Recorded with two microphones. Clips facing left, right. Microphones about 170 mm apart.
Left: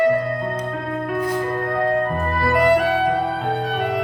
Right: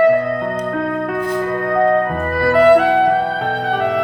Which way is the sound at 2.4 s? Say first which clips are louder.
Right 7 dB; 65° right (ahead or behind).